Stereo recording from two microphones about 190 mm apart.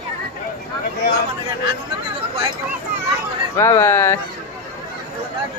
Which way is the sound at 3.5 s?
15° left (ahead or behind).